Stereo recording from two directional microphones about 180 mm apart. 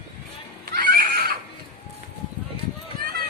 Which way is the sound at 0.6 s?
60° right (ahead or behind).